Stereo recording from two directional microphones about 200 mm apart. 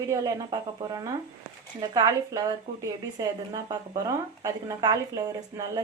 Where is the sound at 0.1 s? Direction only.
20° right (ahead or behind).